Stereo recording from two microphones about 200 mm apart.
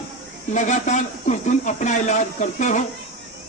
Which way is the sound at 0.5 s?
35° left (ahead or behind).